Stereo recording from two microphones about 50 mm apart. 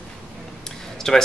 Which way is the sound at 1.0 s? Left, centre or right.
Centre.